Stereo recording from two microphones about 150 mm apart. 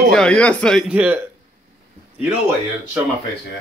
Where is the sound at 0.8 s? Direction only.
10° right (ahead or behind).